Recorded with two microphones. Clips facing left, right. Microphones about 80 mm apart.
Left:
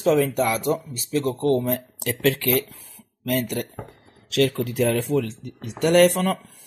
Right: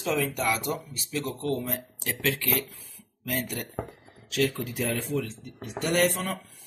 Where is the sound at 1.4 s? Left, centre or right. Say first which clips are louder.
Left 9 dB; left.